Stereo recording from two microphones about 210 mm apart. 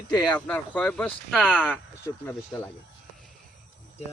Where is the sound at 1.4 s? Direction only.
5° right (ahead or behind).